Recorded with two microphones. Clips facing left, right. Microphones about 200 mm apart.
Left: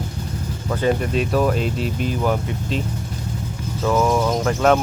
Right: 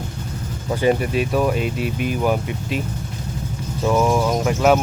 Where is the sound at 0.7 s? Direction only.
15° right (ahead or behind).